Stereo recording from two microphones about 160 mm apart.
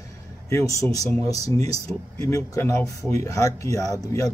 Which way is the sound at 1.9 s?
10° left (ahead or behind).